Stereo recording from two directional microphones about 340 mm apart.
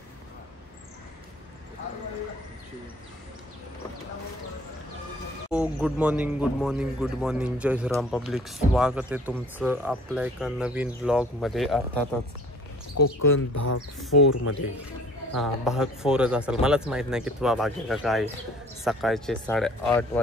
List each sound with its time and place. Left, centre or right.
5.5 s speech: centre
12.9 s speech: left
15.3 s speech: centre